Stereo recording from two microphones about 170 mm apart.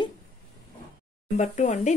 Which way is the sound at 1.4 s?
45° left (ahead or behind).